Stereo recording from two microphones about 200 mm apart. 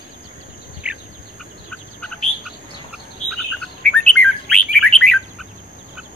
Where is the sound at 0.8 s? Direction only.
5° right (ahead or behind).